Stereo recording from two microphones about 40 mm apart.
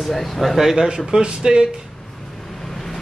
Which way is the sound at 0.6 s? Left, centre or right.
Centre.